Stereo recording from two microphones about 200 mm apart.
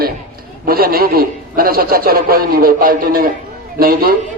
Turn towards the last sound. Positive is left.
turn(degrees=-45)  # may be behind; listen again after turning